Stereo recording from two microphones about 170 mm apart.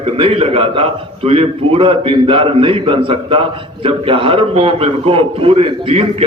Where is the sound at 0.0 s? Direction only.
35° right (ahead or behind).